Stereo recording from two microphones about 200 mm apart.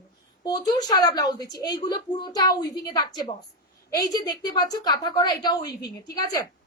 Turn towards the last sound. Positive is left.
turn(degrees=20)  # may be behind; listen again after turning